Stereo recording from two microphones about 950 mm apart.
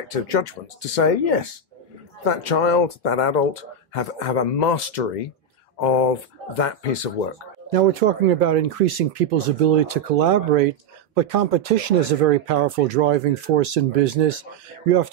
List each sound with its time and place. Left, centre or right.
0.1 s speech: left
7.7 s speech: right